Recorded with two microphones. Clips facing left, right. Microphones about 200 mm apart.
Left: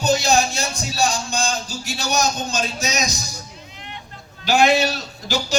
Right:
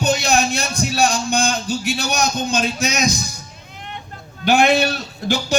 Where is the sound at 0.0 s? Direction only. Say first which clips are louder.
Even; 60° right (ahead or behind).